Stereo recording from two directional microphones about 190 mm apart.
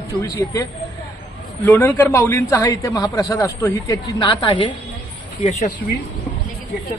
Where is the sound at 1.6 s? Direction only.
10° left (ahead or behind); by 4.7 s 25° left (ahead or behind).